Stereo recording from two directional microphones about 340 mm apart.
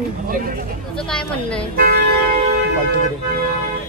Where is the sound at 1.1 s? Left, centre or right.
Centre.